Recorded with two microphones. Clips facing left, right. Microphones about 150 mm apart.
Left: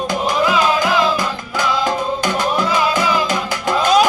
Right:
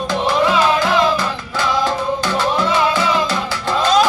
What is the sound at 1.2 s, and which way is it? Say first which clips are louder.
Music: even; 15° left (ahead or behind).